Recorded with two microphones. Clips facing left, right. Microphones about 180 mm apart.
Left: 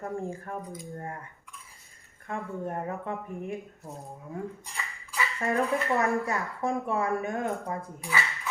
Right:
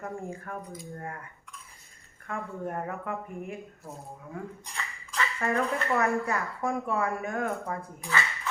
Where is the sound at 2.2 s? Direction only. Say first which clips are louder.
Left 1 dB; 25° left (ahead or behind).